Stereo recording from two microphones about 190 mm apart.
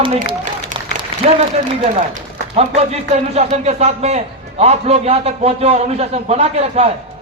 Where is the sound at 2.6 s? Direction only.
35° right (ahead or behind).